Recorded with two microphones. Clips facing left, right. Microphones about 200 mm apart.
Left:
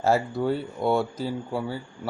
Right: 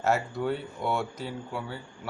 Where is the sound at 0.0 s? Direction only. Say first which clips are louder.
Left 4 dB; 35° left (ahead or behind).